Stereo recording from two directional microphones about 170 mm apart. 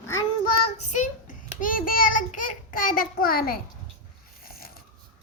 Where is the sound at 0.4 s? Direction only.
40° left (ahead or behind); by 3.6 s 60° left (ahead or behind).